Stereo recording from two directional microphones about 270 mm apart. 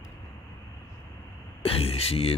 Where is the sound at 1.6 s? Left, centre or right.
Left.